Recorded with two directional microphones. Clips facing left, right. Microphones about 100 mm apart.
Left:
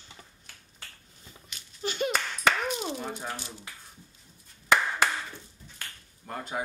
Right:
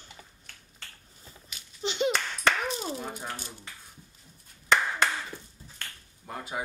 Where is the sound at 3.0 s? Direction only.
Centre (ahead or behind).